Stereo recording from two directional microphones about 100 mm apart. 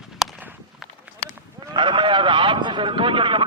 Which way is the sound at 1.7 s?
55° right (ahead or behind).